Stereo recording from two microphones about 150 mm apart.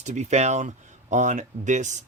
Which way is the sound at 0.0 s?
50° right (ahead or behind).